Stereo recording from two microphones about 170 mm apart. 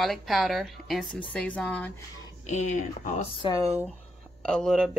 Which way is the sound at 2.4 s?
45° left (ahead or behind).